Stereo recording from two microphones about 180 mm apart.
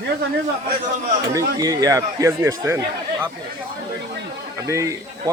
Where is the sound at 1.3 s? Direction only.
20° right (ahead or behind).